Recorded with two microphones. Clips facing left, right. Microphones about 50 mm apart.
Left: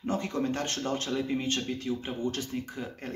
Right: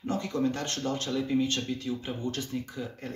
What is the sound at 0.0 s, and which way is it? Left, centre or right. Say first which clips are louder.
Speech: right 1 dB; left.